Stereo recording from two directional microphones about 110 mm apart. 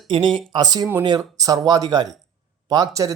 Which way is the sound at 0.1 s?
45° right (ahead or behind).